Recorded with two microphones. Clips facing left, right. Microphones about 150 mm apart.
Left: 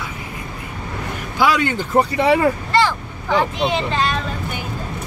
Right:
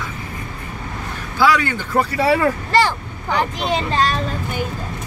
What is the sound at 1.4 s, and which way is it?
Speech, 20° left (ahead or behind).